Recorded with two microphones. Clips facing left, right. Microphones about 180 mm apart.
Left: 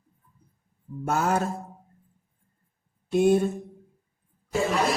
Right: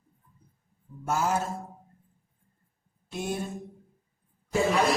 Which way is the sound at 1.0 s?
60° left (ahead or behind).